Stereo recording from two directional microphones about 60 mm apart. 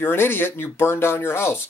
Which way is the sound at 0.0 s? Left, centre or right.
Left.